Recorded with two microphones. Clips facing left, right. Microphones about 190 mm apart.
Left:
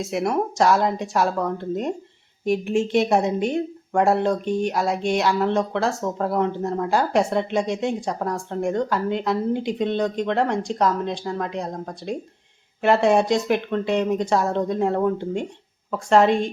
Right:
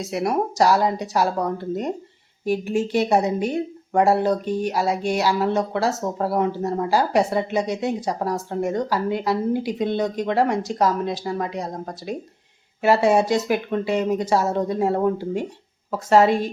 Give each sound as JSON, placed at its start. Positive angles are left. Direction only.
{"t": 0.0, "sound": "a woman's voice", "side_deg": 0}